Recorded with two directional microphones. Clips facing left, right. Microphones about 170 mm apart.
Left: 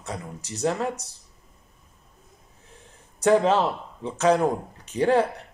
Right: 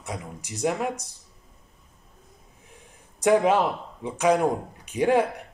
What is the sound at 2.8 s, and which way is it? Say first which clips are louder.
Speech: left 1 dB; 15° right (ahead or behind).